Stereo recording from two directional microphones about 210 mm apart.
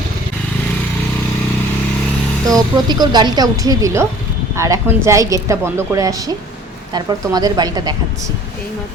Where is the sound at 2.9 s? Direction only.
20° right (ahead or behind).